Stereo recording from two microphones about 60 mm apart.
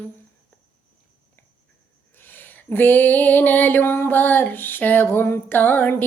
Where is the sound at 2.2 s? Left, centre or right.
Left.